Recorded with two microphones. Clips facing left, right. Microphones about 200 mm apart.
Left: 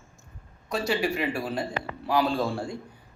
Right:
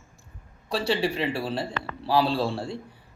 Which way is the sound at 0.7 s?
30° right (ahead or behind).